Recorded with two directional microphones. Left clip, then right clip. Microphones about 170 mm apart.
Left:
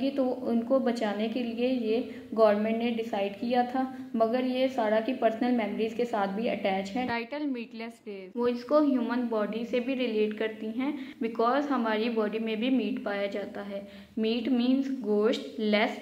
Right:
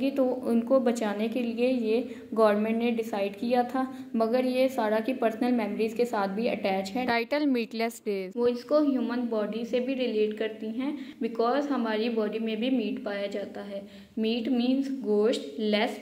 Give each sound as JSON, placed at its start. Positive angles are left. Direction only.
{"t": 0.1, "sound": "a woman's voice", "side_deg": -15}
{"t": 7.1, "sound": "a woman's voice", "side_deg": -45}
{"t": 8.4, "sound": "a woman's voice", "side_deg": -15}